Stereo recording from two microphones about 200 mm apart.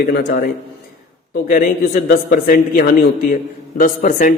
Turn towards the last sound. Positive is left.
turn(degrees=40)  # may be behind; listen again after turning